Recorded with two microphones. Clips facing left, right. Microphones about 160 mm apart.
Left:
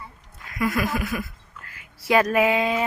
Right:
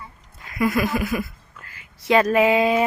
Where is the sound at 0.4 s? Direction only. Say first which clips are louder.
Right 3 dB; 5° right (ahead or behind).